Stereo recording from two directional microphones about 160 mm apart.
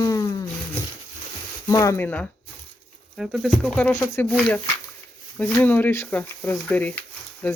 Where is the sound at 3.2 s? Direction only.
Centre (ahead or behind).